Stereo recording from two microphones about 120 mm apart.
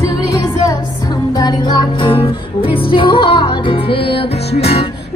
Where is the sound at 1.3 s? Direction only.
35° left (ahead or behind); by 4.8 s 55° left (ahead or behind).